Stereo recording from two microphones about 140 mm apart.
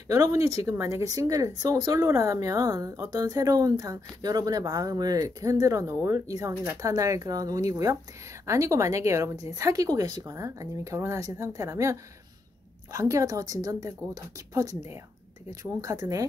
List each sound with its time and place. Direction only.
0.1 s speech: 25° right (ahead or behind)